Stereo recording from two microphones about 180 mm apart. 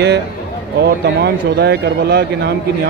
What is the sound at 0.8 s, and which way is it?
Speech, 65° right (ahead or behind).